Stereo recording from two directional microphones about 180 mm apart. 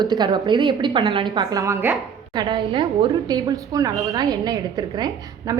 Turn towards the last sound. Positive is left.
turn(degrees=-20)  # may be behind; listen again after turning